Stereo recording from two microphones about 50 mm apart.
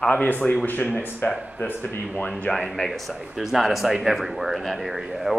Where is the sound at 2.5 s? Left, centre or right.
Centre.